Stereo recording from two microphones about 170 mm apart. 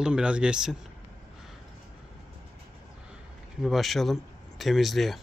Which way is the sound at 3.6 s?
Centre (ahead or behind).